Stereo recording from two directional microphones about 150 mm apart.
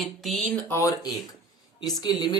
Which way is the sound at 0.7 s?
20° left (ahead or behind).